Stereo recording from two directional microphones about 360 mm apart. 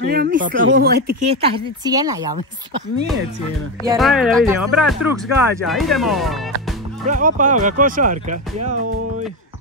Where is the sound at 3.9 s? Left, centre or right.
Centre.